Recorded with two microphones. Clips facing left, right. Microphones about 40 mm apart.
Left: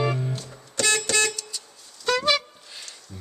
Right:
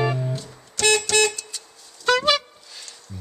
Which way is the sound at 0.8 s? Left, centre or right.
Right.